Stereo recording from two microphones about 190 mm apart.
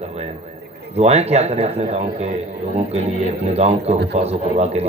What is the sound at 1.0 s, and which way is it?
Speech, 35° right (ahead or behind).